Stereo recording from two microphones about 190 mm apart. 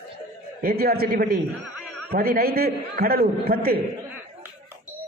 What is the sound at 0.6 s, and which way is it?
A man's voice, 55° right (ahead or behind).